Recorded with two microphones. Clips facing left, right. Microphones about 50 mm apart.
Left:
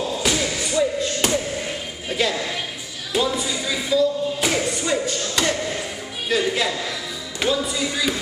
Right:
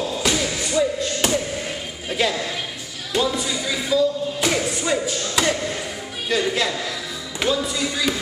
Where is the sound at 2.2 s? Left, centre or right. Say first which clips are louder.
Even; centre.